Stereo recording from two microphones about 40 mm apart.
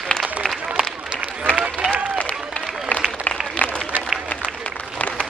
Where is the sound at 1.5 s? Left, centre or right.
Right.